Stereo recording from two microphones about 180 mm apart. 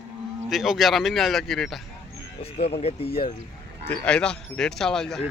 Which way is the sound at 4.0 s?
5° left (ahead or behind).